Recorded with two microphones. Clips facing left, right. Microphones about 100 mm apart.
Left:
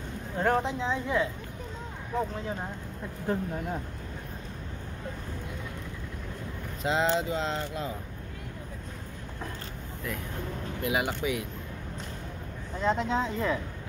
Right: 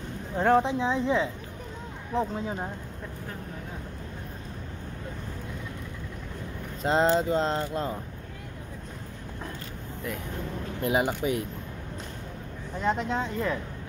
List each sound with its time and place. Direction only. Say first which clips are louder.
0.4 s speech: right 4 dB; 15° right (ahead or behind)
3.3 s speech: left 14 dB; 25° left (ahead or behind)
6.8 s speech: right 4 dB; 40° right (ahead or behind)
10.8 s speech: right 4 dB; 35° right (ahead or behind)
12.8 s speech: left 1 dB; 5° right (ahead or behind)